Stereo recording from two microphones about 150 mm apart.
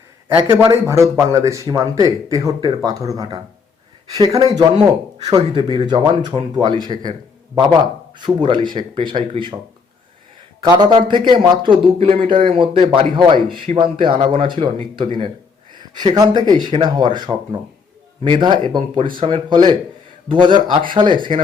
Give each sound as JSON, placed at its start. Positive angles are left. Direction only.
{"t": 0.5, "sound": "a man's voice", "side_deg": -20}
{"t": 10.6, "sound": "a man's voice", "side_deg": -30}